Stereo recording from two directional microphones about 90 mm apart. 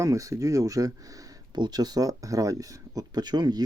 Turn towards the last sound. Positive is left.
turn(degrees=-50)  # may be behind; listen again after turning